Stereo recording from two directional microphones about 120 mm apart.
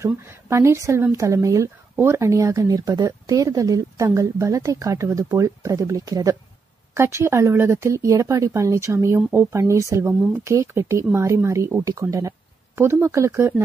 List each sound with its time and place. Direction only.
0.0 s speech: 25° right (ahead or behind)